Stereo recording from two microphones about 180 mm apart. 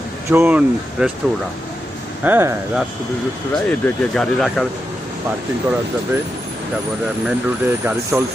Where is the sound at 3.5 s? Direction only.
5° left (ahead or behind).